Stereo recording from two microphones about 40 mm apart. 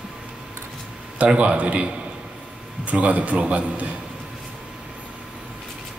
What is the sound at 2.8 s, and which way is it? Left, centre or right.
A man's voice, right.